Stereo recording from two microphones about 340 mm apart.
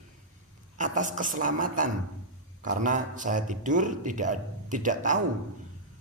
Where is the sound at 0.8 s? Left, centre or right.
Right.